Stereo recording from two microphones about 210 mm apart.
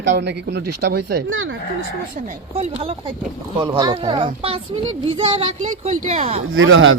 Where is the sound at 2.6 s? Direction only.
30° right (ahead or behind).